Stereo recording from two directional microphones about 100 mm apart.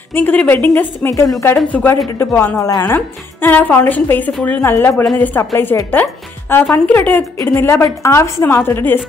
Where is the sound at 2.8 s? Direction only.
20° left (ahead or behind).